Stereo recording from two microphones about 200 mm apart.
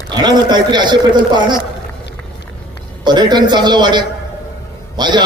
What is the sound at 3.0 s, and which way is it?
A man's voice, 20° right (ahead or behind).